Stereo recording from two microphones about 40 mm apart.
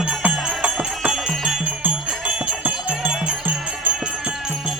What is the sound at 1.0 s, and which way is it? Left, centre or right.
Jingle bell, right.